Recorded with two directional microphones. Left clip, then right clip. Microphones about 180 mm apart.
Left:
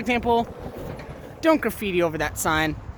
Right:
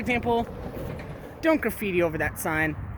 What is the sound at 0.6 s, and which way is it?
Vehicle, 55° left (ahead or behind).